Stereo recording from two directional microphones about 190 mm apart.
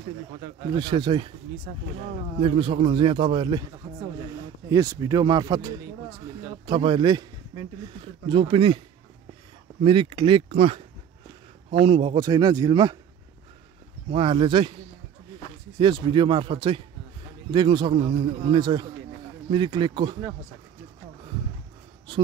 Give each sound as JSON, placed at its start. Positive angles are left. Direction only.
{"t": 0.7, "sound": "a man's voice", "side_deg": -25}
{"t": 2.4, "sound": "a man's voice", "side_deg": -30}
{"t": 9.8, "sound": "a man's voice", "side_deg": -25}
{"t": 14.1, "sound": "a man's voice", "side_deg": -25}
{"t": 15.8, "sound": "a man's voice", "side_deg": -25}